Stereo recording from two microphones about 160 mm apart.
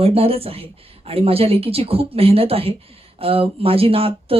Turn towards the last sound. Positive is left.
turn(degrees=-35)  # may be behind; listen again after turning